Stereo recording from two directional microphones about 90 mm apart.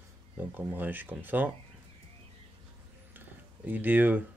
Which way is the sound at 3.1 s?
20° right (ahead or behind).